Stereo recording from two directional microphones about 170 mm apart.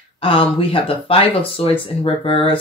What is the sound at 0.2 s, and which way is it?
Speech, 30° left (ahead or behind).